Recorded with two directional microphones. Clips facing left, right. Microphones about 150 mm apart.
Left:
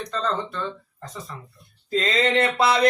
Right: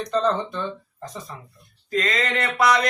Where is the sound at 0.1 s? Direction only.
15° right (ahead or behind).